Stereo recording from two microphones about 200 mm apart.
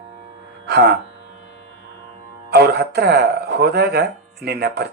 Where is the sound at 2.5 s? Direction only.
55° right (ahead or behind).